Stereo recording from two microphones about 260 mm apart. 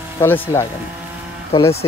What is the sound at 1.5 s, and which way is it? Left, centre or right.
Speech, centre.